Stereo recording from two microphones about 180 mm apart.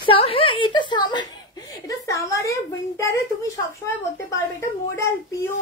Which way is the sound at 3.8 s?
15° left (ahead or behind).